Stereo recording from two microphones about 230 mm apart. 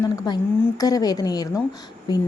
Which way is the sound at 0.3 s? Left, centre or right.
Centre.